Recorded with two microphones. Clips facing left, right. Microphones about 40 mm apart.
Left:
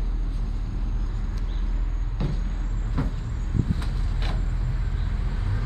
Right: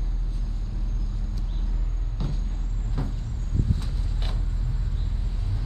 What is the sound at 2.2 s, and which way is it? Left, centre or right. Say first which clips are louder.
Vehicle: left 3 dB; centre.